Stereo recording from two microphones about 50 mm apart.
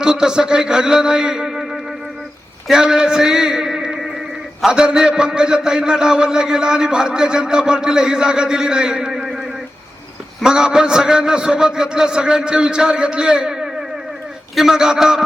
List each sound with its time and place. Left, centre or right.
0.0 s a man's voice: centre
2.7 s a sound: centre
4.7 s a man's voice: centre
10.4 s a man's voice: centre